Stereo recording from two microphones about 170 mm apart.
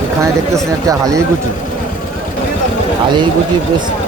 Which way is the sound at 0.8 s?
20° right (ahead or behind).